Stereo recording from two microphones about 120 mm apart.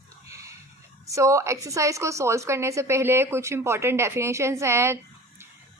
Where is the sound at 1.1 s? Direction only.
25° right (ahead or behind).